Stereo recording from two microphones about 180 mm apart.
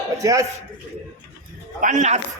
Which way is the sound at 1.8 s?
45° right (ahead or behind).